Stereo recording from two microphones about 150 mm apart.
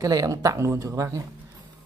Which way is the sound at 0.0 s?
20° right (ahead or behind).